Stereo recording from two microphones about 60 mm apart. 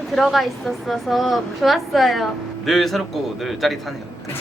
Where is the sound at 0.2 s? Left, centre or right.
Centre.